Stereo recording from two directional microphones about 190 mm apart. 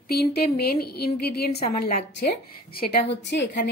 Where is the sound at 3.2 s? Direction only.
65° left (ahead or behind).